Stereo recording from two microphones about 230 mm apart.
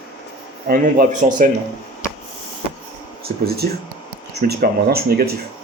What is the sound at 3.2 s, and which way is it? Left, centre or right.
Speech, right.